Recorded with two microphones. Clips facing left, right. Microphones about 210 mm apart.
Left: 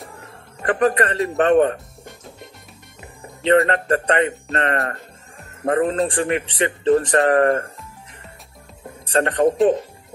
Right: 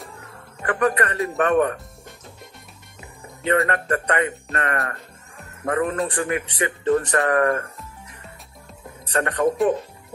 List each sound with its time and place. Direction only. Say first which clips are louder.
0.6 s speech: left 3 dB; 30° left (ahead or behind)
3.6 s speech: left 4 dB; 30° left (ahead or behind)
9.0 s speech: left 4 dB; 30° left (ahead or behind)